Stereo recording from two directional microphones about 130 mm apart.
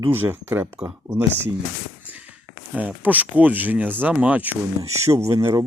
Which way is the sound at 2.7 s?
10° right (ahead or behind).